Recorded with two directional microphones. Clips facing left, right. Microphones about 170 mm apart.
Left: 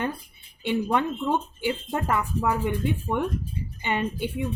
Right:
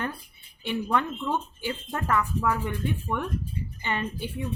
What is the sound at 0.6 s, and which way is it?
Speech, 20° left (ahead or behind).